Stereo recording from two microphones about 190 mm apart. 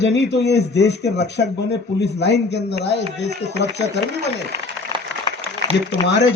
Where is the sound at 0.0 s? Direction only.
65° left (ahead or behind).